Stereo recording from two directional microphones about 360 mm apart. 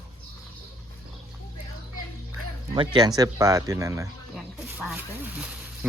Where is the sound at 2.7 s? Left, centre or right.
Centre.